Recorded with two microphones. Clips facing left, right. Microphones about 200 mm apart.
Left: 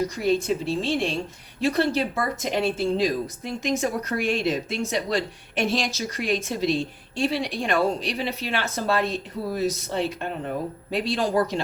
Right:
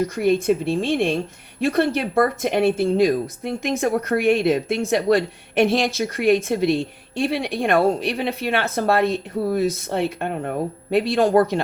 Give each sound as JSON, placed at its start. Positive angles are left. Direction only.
{"t": 0.2, "sound": "speech", "side_deg": -55}